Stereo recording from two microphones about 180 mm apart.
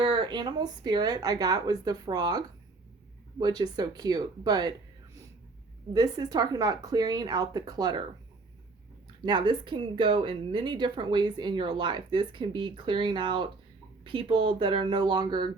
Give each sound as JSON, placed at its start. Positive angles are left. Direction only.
{"t": 0.0, "sound": "speech", "side_deg": -30}
{"t": 5.9, "sound": "speech", "side_deg": -20}
{"t": 9.2, "sound": "speech", "side_deg": -25}